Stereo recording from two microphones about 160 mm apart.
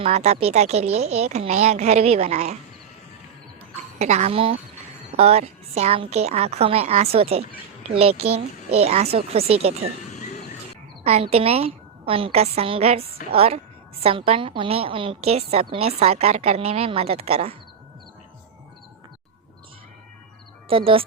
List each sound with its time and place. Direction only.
0.0 s a woman's voice: 40° right (ahead or behind)
3.9 s a woman's voice: 45° right (ahead or behind)
10.1 s bird: 45° left (ahead or behind)
11.0 s a woman's voice: 40° right (ahead or behind)
20.7 s a woman's voice: 35° right (ahead or behind)